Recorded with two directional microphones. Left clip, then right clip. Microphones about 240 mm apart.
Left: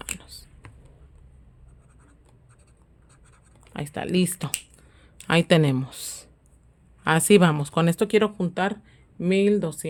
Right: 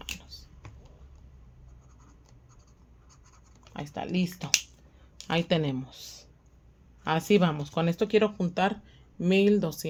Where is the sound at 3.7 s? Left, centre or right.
Left.